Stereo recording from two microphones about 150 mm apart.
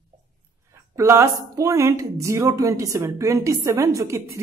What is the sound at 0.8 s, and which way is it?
A woman's voice, 20° right (ahead or behind).